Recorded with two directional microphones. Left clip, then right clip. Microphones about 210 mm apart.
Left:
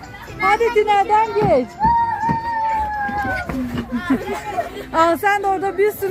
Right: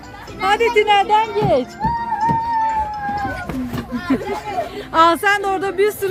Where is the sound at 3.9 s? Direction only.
25° left (ahead or behind).